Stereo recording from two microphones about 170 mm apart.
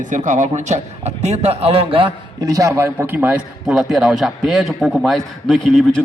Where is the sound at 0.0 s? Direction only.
45° right (ahead or behind).